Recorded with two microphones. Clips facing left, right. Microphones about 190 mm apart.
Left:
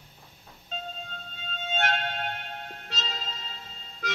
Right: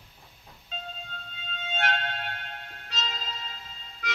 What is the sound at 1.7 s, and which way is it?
Music, 45° left (ahead or behind).